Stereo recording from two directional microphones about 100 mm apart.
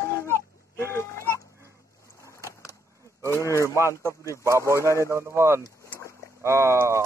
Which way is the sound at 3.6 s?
25° right (ahead or behind).